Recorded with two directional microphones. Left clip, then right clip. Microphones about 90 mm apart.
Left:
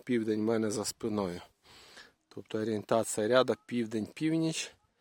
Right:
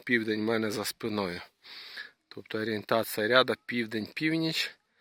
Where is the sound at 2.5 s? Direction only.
15° left (ahead or behind).